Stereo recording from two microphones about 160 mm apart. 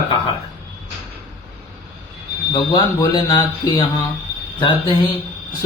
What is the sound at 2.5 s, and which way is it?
Speech, 30° left (ahead or behind).